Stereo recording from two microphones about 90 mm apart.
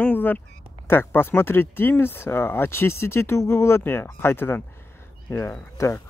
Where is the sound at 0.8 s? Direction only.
25° left (ahead or behind).